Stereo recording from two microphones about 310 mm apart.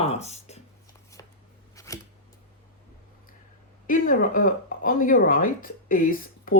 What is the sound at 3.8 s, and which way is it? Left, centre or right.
Speech, left.